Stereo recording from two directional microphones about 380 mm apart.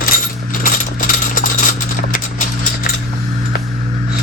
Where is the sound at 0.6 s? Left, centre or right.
Left.